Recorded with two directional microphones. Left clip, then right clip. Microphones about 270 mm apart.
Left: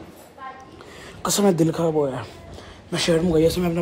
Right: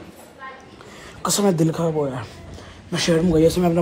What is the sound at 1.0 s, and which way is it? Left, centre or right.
Speech, centre.